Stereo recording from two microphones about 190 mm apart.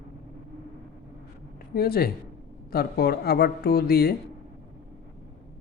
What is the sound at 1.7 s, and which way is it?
Speech, 55° left (ahead or behind).